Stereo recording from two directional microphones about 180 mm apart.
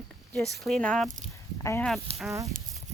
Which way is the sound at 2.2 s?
15° right (ahead or behind).